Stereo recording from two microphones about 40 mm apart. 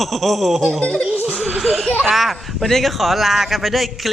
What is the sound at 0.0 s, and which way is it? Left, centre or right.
Speech, centre.